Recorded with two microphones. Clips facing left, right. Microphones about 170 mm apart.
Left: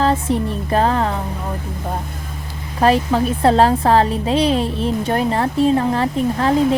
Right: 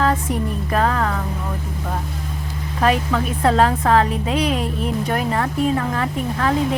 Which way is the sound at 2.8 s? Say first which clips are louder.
Left 4 dB; 30° left (ahead or behind).